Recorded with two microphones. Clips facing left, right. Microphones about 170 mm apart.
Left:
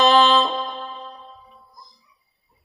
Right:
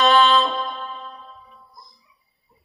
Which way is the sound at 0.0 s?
40° left (ahead or behind).